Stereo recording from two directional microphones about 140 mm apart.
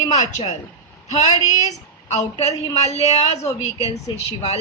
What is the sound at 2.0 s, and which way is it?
A woman's voice, 50° left (ahead or behind).